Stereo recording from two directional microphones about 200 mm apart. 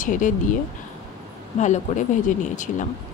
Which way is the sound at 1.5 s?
35° left (ahead or behind).